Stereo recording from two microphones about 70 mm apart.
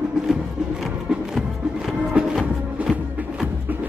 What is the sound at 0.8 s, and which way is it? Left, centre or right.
Music, centre.